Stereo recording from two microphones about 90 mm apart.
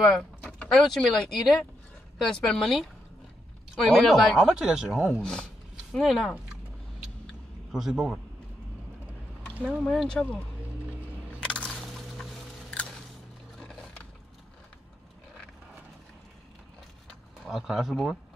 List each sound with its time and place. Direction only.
0.0 s a sound: 10° left (ahead or behind)
0.7 s speech: 5° left (ahead or behind); by 5.2 s 10° right (ahead or behind)
5.2 s speech: 10° left (ahead or behind)
5.9 s speech: centre (ahead or behind)
7.7 s speech: 5° right (ahead or behind)
9.6 s speech: 15° right (ahead or behind)
9.8 s speech: 10° left (ahead or behind)
11.4 s a sound: 10° left (ahead or behind)
13.6 s music: 10° left (ahead or behind)
17.5 s speech: 5° right (ahead or behind)